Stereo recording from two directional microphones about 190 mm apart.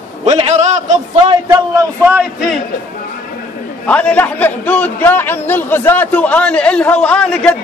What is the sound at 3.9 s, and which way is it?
A man's voice, 5° left (ahead or behind).